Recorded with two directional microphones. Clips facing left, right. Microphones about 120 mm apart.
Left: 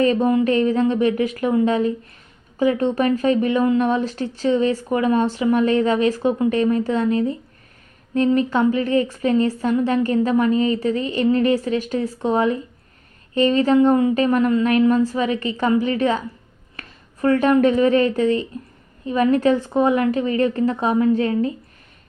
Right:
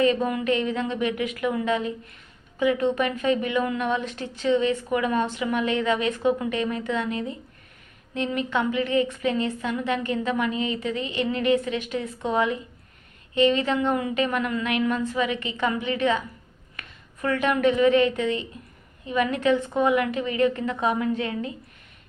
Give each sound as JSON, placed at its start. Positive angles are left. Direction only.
{"t": 0.0, "sound": "a woman's voice", "side_deg": 35}